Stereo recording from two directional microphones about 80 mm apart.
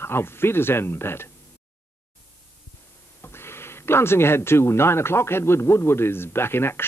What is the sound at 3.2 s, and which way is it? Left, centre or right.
Speech, left.